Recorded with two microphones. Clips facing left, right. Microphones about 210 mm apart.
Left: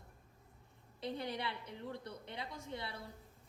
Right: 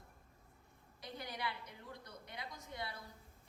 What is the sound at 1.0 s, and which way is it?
A woman's voice, 25° left (ahead or behind).